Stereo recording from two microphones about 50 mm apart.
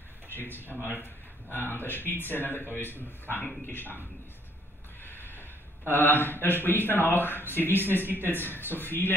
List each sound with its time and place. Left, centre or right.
0.3 s speech: left
5.0 s speech: left